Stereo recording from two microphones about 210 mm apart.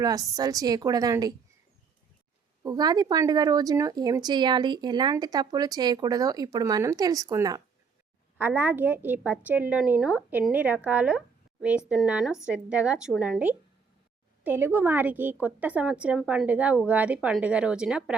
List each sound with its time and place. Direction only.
0.0 s a woman's voice: 15° right (ahead or behind)
2.6 s a woman's voice: 20° right (ahead or behind)